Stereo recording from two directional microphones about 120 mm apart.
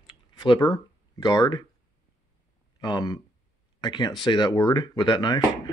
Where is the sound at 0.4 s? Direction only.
35° left (ahead or behind).